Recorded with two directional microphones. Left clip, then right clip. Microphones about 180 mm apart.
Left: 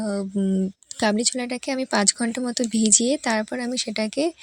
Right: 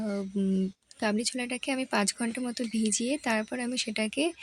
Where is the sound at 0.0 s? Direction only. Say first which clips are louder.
Left 6 dB; 30° left (ahead or behind).